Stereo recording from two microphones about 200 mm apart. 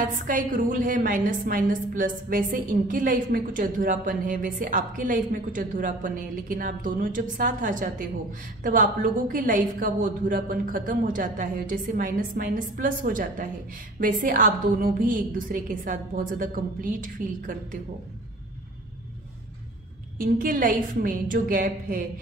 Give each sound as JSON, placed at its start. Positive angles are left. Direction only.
{"t": 0.1, "sound": "a woman's voice", "side_deg": -40}
{"t": 20.2, "sound": "a woman's voice", "side_deg": -45}